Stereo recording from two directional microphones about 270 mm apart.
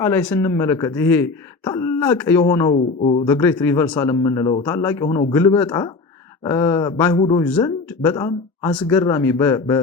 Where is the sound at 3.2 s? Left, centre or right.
Centre.